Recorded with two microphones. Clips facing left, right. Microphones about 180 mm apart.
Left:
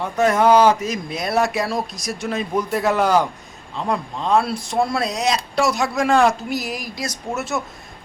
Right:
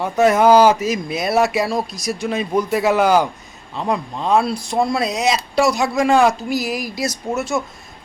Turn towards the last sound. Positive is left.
turn(degrees=0)  # may be behind; listen again after turning